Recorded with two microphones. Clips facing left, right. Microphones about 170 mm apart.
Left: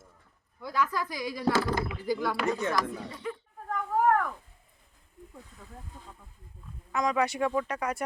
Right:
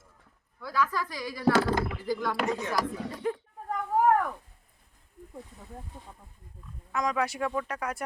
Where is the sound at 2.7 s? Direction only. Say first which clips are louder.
Right 1 dB; 45° right (ahead or behind).